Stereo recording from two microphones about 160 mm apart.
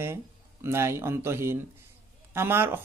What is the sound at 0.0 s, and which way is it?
Speech, 15° right (ahead or behind).